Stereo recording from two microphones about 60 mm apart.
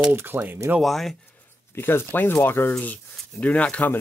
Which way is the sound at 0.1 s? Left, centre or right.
Right.